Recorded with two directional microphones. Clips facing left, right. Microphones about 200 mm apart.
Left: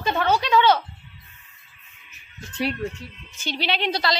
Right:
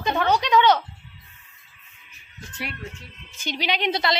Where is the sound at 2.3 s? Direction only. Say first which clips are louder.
Left 9 dB; 25° left (ahead or behind).